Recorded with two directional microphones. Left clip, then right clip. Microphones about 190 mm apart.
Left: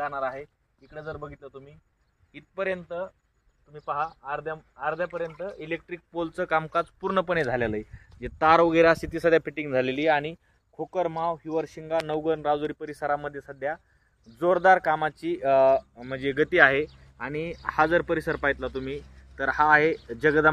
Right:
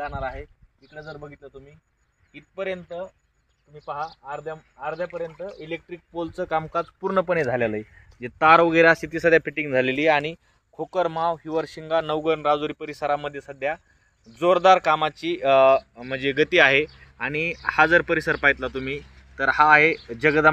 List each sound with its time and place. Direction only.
0.0 s speech: 5° right (ahead or behind); by 20.4 s 35° right (ahead or behind)